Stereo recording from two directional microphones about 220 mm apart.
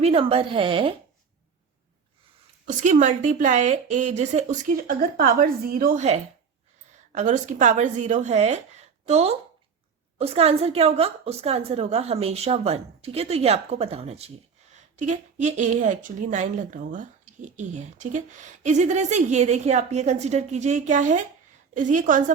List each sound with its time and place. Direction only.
0.0 s a woman's voice: 25° right (ahead or behind)
2.6 s a woman's voice: 35° right (ahead or behind)